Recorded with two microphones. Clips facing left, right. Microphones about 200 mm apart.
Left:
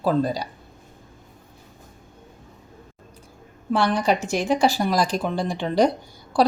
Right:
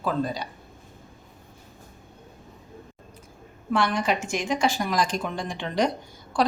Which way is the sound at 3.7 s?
35° left (ahead or behind).